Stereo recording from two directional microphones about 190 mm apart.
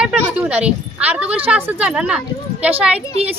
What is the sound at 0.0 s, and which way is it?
A woman's voice, 5° right (ahead or behind).